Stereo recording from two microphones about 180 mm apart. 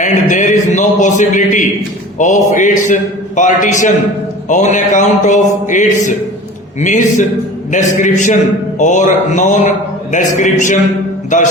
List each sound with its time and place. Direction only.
0.0 s a man's voice: 45° left (ahead or behind)
11.3 s music: 40° left (ahead or behind)